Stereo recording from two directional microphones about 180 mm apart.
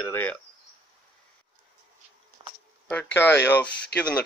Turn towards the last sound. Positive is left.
turn(degrees=10)  # may be behind; listen again after turning